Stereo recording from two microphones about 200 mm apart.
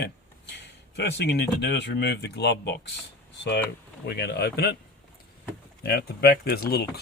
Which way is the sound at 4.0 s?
55° left (ahead or behind).